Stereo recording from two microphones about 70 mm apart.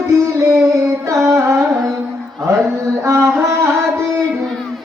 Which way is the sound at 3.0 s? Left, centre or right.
Right.